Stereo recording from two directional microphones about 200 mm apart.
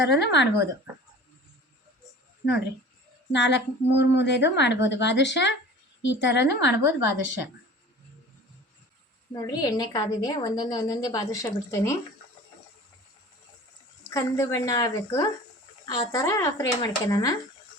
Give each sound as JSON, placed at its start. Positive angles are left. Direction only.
{"t": 0.0, "sound": "a woman's voice", "side_deg": 60}
{"t": 3.3, "sound": "a woman's voice", "side_deg": 60}
{"t": 9.3, "sound": "a woman's voice", "side_deg": 20}
{"t": 14.1, "sound": "a woman's voice", "side_deg": 15}